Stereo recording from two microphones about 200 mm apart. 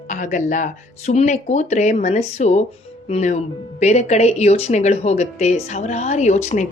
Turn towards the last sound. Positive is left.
turn(degrees=35)  # may be behind; listen again after turning